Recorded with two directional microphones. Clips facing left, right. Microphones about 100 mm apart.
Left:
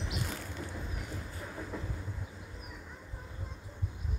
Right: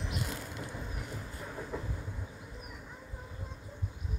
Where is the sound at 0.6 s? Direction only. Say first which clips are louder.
Even; 5° right (ahead or behind).